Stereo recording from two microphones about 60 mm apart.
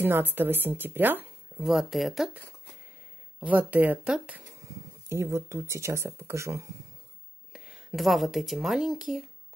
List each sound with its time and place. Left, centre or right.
0.0 s a woman's voice: right
1.6 s speech: centre
3.3 s speech: right
5.1 s speech: right
7.5 s a sound: centre
7.9 s speech: centre